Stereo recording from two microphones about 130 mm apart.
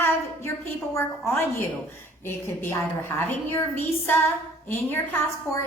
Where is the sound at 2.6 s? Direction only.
20° left (ahead or behind).